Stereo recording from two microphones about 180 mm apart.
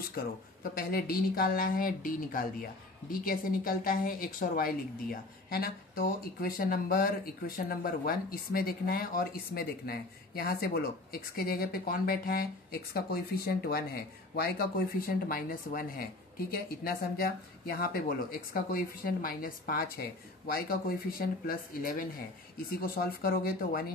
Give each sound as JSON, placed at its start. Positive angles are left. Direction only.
{"t": 0.9, "sound": "a woman's voice", "side_deg": 55}